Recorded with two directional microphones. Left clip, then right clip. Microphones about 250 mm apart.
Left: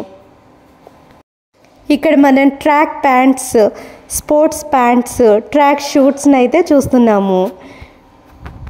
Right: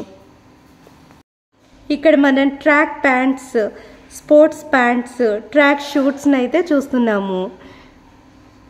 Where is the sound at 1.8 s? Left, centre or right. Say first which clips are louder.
Left 3 dB; left.